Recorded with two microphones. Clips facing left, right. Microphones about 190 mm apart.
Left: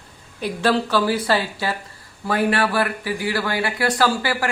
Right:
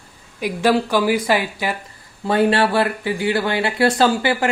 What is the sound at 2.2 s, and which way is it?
Speech, 25° right (ahead or behind).